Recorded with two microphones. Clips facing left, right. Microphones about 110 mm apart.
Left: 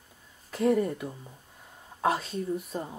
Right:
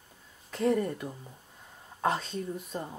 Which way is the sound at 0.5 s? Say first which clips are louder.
Left 2 dB; 5° left (ahead or behind).